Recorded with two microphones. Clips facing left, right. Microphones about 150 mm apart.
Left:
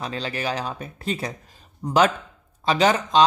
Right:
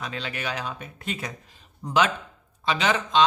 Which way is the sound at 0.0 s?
35° left (ahead or behind).